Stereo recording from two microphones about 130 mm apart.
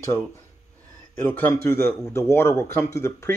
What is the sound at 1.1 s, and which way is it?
A man's voice, 15° left (ahead or behind).